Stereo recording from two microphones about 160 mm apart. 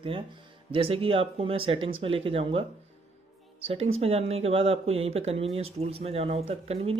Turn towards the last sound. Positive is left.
turn(degrees=-40)  # may be behind; listen again after turning